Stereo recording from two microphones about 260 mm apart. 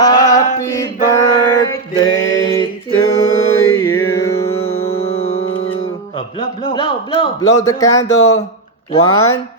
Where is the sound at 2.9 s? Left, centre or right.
Left.